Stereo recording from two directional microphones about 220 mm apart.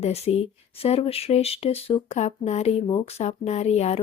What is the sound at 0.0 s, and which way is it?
Speech, 30° left (ahead or behind).